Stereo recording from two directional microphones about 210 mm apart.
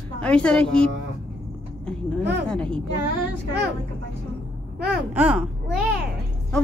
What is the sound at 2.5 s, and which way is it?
Speech, 5° left (ahead or behind).